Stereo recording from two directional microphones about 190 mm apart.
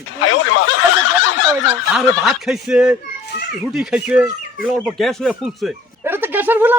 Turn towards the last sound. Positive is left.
turn(degrees=-10)  # may be behind; listen again after turning